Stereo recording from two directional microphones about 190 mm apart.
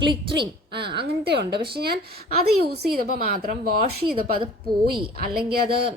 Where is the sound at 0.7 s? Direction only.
60° right (ahead or behind).